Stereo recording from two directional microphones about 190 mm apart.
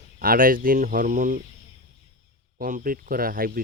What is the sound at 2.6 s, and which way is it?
Speech, 50° right (ahead or behind).